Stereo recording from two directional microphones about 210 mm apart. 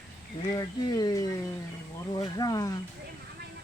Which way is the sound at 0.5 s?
20° left (ahead or behind).